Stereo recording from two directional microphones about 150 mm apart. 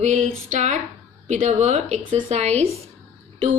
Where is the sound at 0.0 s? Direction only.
50° right (ahead or behind).